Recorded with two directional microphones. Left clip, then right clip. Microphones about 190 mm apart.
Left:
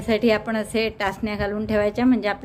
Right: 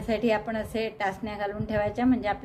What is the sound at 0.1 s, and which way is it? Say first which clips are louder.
A woman's voice: left 6 dB; 25° left (ahead or behind).